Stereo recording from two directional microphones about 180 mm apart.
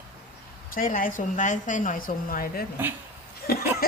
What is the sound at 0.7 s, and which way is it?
A woman's voice, 50° left (ahead or behind).